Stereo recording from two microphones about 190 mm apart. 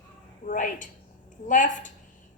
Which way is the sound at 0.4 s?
45° left (ahead or behind).